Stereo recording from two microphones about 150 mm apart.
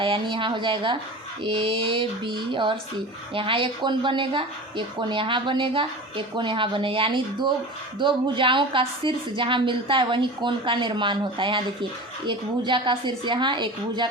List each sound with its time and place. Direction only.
0.0 s a woman's voice: 35° right (ahead or behind)